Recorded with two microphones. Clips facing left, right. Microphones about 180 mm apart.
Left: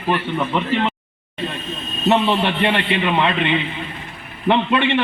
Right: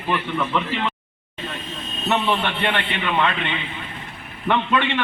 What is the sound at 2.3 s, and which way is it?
A man's voice, 30° left (ahead or behind).